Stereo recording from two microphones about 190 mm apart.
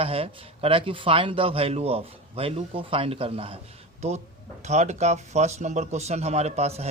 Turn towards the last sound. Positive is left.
turn(degrees=-35)  # may be behind; listen again after turning